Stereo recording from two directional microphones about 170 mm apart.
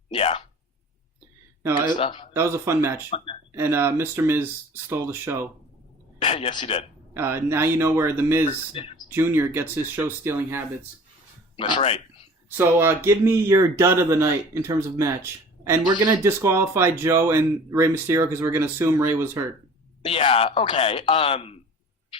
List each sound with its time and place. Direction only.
0.1 s a sound: 35° left (ahead or behind)
2.0 s speech: 30° left (ahead or behind)
2.3 s speech: 15° right (ahead or behind)
3.1 s speech: 35° left (ahead or behind)
3.5 s speech: 15° right (ahead or behind)
6.1 s speech: 30° left (ahead or behind)
7.1 s speech: 15° right (ahead or behind)
8.7 s speech: 35° left (ahead or behind)
9.0 s speech: 15° right (ahead or behind)
11.7 s speech: 35° left (ahead or behind)
12.5 s speech: 15° right (ahead or behind)
20.1 s speech: 35° left (ahead or behind)